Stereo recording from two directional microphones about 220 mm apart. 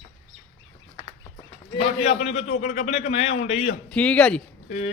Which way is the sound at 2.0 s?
30° left (ahead or behind).